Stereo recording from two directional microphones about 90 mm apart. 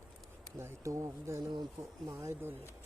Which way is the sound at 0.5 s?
30° right (ahead or behind).